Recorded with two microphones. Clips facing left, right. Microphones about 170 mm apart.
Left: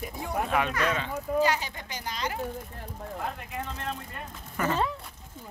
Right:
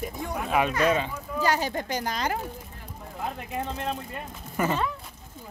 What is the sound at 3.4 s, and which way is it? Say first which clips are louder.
Speech: right 4 dB; 25° right (ahead or behind).